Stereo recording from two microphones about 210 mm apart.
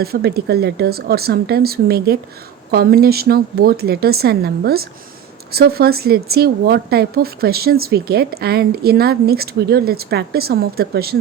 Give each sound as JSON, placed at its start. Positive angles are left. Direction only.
{"t": 0.0, "sound": "speech", "side_deg": -50}